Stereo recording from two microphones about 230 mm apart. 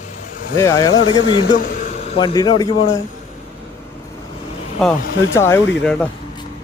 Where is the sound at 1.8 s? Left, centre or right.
Left.